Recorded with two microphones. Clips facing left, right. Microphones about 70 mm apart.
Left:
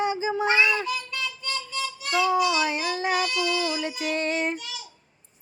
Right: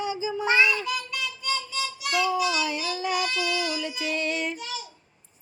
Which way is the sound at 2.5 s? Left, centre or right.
Left.